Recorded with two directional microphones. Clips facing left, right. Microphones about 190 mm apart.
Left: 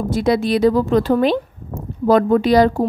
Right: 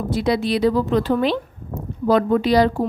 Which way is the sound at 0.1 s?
45° left (ahead or behind).